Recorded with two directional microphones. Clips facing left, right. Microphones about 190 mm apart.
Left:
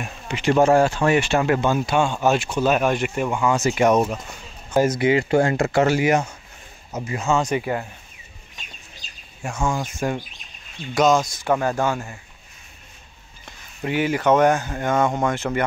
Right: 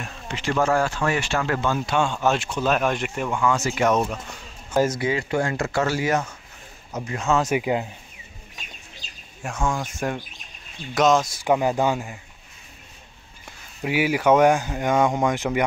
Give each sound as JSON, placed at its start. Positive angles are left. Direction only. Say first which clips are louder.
{"t": 0.0, "sound": "speech", "louder": "left 5 dB", "side_deg": 15}
{"t": 3.3, "sound": "speech", "louder": "left 2 dB", "side_deg": 20}
{"t": 5.1, "sound": "speech", "louder": "left 6 dB", "side_deg": 25}
{"t": 6.9, "sound": "speech", "louder": "left 1 dB", "side_deg": 5}
{"t": 7.6, "sound": "speech", "louder": "right 2 dB", "side_deg": -15}
{"t": 9.4, "sound": "speech", "louder": "left 2 dB", "side_deg": 0}
{"t": 11.4, "sound": "speech", "louder": "right 1 dB", "side_deg": -15}
{"t": 13.5, "sound": "speech", "louder": "left 1 dB", "side_deg": -10}